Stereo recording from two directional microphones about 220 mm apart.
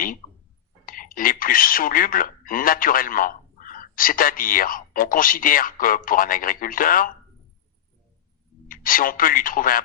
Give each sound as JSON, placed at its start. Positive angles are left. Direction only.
{"t": 0.9, "sound": "speech", "side_deg": 40}
{"t": 8.6, "sound": "speech", "side_deg": 40}